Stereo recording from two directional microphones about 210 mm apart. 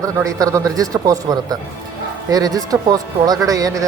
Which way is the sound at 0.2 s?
15° right (ahead or behind).